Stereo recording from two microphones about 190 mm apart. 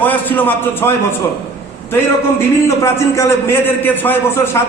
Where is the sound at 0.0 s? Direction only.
10° left (ahead or behind).